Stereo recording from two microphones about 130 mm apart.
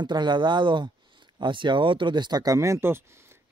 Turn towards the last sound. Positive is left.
turn(degrees=-20)  # may be behind; listen again after turning